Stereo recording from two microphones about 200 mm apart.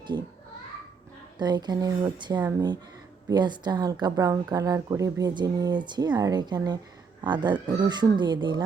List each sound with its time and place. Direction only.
1.4 s speech: 20° right (ahead or behind)